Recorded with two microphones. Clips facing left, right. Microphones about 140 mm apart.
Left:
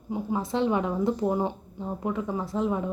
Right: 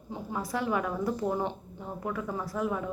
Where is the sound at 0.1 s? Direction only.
20° left (ahead or behind).